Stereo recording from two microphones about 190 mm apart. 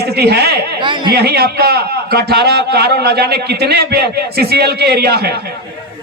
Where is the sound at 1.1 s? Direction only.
55° right (ahead or behind).